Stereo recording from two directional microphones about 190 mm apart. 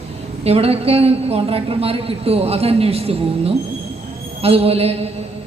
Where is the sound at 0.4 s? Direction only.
30° right (ahead or behind).